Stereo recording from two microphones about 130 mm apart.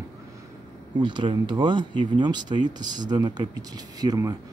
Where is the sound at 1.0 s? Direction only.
40° right (ahead or behind).